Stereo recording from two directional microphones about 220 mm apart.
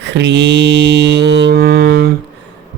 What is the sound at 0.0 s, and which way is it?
Mantra, 50° right (ahead or behind).